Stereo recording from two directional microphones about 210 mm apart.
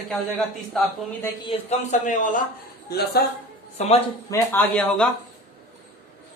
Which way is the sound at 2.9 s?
50° left (ahead or behind).